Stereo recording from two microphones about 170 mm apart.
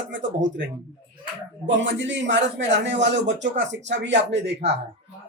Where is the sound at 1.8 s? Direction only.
90° right.